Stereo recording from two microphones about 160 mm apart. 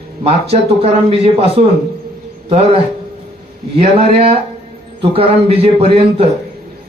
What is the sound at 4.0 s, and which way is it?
A man's voice, 35° right (ahead or behind).